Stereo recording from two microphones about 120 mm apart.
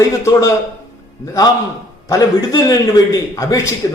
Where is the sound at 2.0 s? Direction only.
30° left (ahead or behind).